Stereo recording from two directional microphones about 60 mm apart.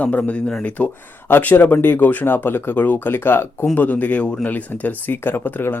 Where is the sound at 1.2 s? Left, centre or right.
Left.